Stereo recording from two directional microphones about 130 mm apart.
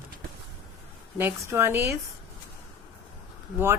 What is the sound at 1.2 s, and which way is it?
Speech, 20° right (ahead or behind).